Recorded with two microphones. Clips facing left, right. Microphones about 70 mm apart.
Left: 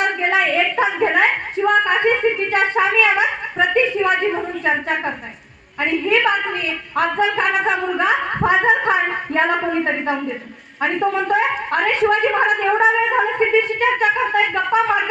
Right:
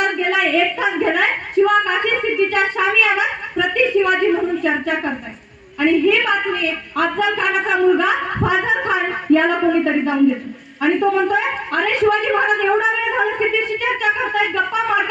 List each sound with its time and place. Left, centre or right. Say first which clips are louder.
0.2 s a woman's voice: right 1 dB; left